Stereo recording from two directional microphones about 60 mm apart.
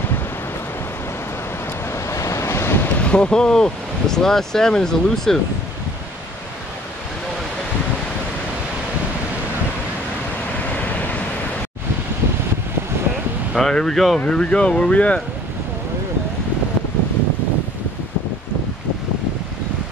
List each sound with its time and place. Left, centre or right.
2.0 s waves: left
3.0 s speech: centre
13.6 s speech: centre
14.2 s speech: centre